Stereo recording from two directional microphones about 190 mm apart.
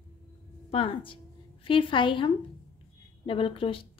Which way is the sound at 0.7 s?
30° left (ahead or behind).